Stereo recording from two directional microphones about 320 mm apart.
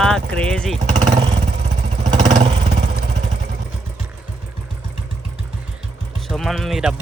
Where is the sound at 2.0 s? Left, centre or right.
Centre.